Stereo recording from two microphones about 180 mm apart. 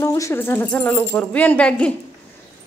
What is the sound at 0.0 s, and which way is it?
Speech, 15° left (ahead or behind).